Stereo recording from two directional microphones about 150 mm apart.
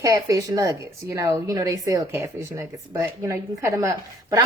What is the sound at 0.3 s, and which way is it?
Speech, 25° right (ahead or behind).